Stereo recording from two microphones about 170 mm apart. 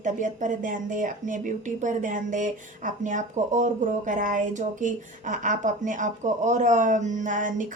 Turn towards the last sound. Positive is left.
turn(degrees=-50)  # may be behind; listen again after turning